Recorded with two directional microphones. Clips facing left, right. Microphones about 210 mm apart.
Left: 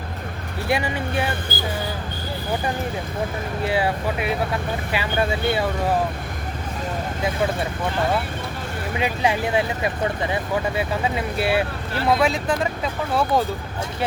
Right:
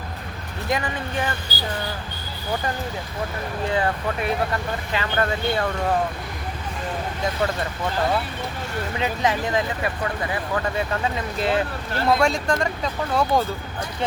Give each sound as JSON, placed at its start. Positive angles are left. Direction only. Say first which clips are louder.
{"t": 0.7, "sound": "speech", "louder": "left 2 dB", "side_deg": 10}
{"t": 1.5, "sound": "vehicle", "louder": "left 4 dB", "side_deg": 50}
{"t": 3.7, "sound": "speech", "louder": "left 1 dB", "side_deg": 10}
{"t": 9.0, "sound": "speech", "louder": "left 2 dB", "side_deg": 10}
{"t": 10.0, "sound": "speech", "louder": "left 3 dB", "side_deg": 20}
{"t": 11.3, "sound": "speech", "louder": "even", "side_deg": 10}